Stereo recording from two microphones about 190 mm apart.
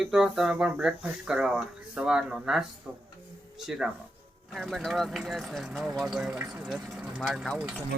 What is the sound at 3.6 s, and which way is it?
Speech, centre (ahead or behind).